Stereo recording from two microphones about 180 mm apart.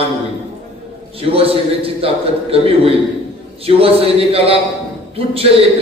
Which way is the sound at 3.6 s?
35° right (ahead or behind).